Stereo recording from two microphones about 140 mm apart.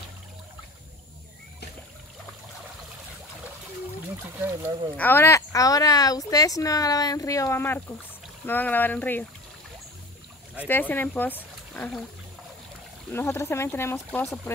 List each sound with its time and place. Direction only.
4.9 s speech: 15° left (ahead or behind)
10.7 s speech: 15° left (ahead or behind)
13.1 s speech: 20° left (ahead or behind)